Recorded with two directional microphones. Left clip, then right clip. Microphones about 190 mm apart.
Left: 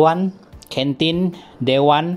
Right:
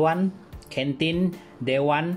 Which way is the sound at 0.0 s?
35° left (ahead or behind).